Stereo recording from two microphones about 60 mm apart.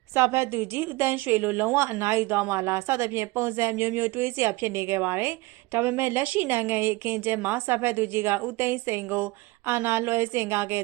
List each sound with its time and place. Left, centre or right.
0.1 s a woman's voice: right
1.7 s a woman's voice: right
2.6 s a woman's voice: right
3.8 s a woman's voice: right
6.2 s a woman's voice: right
6.5 s a woman's voice: right